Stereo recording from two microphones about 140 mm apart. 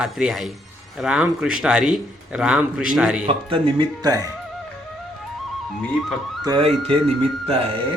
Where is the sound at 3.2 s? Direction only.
40° right (ahead or behind).